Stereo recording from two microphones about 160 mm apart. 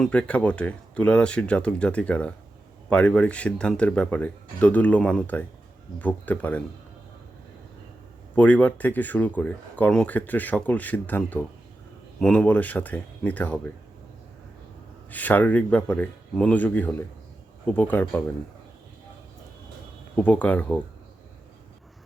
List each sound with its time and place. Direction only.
0.0 s speech: 5° left (ahead or behind)
8.4 s speech: 10° left (ahead or behind)
15.1 s speech: 10° left (ahead or behind)
20.1 s speech: 10° left (ahead or behind)